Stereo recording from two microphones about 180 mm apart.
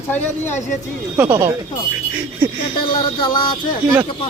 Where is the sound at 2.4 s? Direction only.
10° right (ahead or behind).